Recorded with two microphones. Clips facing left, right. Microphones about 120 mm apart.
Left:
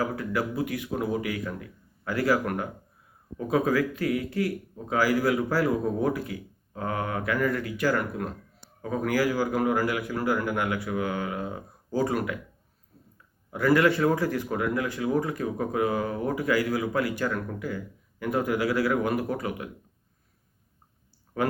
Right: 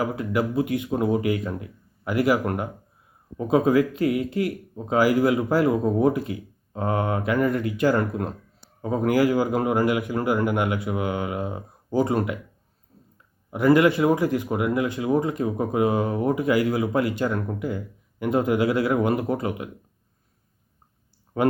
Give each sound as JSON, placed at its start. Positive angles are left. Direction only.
{"t": 0.0, "sound": "speech", "side_deg": -20}
{"t": 13.5, "sound": "speech", "side_deg": -20}
{"t": 21.4, "sound": "speech", "side_deg": -20}